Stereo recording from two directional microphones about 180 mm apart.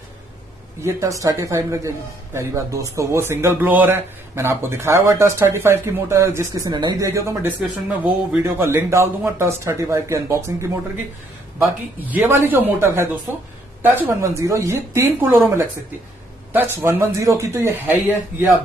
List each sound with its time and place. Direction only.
0.8 s a man's voice: 15° right (ahead or behind)